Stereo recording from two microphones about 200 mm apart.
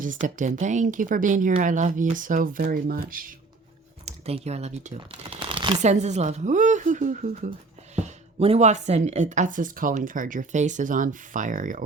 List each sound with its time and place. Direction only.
0.0 s speech: 40° right (ahead or behind)
4.0 s speech: 30° right (ahead or behind)
5.8 s speech: 35° right (ahead or behind)